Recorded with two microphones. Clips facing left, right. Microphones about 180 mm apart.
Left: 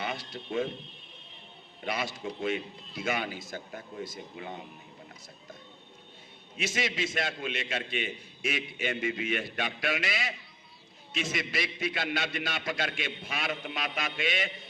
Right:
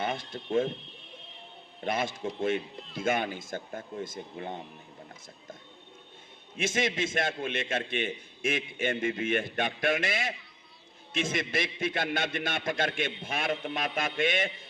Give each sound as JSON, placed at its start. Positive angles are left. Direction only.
{"t": 0.0, "sound": "speech", "side_deg": -50}
{"t": 1.8, "sound": "a man's voice", "side_deg": -50}
{"t": 6.6, "sound": "a man's voice", "side_deg": -50}